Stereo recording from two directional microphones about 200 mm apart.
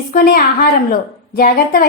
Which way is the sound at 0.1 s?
45° left (ahead or behind).